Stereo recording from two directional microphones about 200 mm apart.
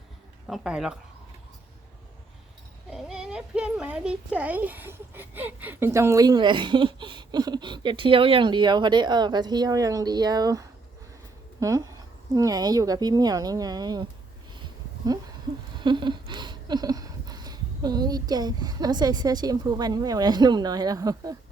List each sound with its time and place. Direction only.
0.4 s speech: 5° right (ahead or behind)
2.9 s a child's voice: 5° right (ahead or behind); by 14.1 s 20° right (ahead or behind)
15.8 s a sound: 25° right (ahead or behind)